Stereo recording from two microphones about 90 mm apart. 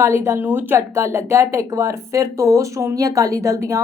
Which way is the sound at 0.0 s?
30° right (ahead or behind).